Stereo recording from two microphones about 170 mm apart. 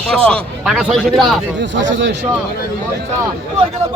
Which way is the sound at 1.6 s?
90° right.